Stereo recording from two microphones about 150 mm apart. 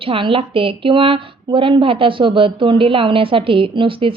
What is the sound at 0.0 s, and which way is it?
A woman's voice, 35° right (ahead or behind).